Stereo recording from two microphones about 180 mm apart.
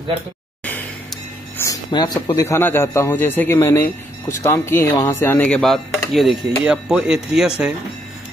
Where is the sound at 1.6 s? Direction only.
20° left (ahead or behind).